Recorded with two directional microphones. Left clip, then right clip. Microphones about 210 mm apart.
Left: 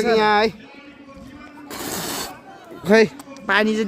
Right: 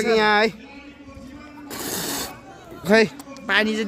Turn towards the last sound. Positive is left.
turn(degrees=25)  # may be behind; listen again after turning